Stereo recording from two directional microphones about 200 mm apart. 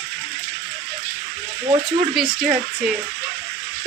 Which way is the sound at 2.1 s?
Centre (ahead or behind).